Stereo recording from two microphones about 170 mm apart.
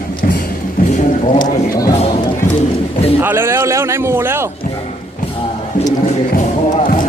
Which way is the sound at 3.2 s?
15° right (ahead or behind).